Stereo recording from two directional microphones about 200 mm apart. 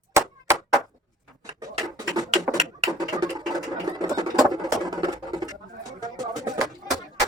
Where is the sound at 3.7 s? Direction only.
20° right (ahead or behind).